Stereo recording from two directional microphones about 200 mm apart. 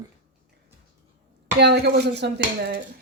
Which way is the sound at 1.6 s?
55° right (ahead or behind).